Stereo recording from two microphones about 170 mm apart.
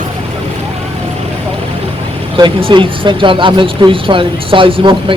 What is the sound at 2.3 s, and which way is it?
Speech, 30° right (ahead or behind).